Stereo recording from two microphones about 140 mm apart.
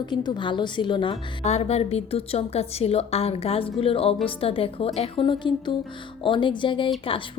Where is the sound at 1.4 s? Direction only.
50° left (ahead or behind).